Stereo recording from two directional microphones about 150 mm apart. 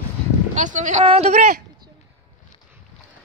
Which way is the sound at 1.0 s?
45° right (ahead or behind).